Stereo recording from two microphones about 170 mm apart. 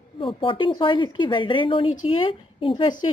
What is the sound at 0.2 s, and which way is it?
Speech, 30° left (ahead or behind).